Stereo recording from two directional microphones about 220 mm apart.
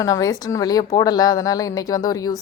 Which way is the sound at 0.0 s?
15° left (ahead or behind).